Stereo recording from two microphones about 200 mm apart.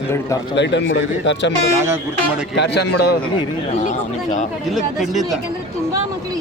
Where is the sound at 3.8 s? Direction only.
40° left (ahead or behind).